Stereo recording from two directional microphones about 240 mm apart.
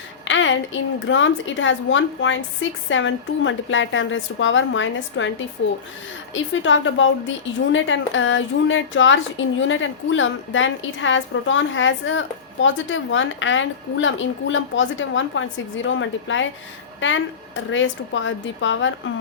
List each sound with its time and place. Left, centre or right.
0.3 s a woman's voice: left